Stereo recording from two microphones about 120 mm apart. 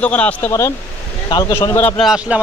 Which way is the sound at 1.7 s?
15° left (ahead or behind).